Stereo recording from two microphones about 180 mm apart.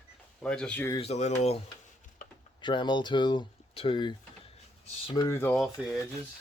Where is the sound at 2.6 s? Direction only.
25° left (ahead or behind).